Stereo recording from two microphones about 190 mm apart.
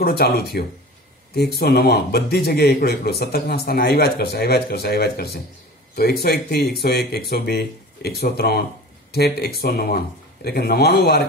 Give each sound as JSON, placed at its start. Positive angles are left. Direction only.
{"t": 0.0, "sound": "speech", "side_deg": 55}